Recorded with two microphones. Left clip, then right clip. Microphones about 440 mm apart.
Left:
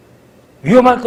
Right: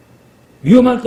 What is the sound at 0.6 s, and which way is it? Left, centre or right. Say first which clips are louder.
Speech: left 2 dB; left.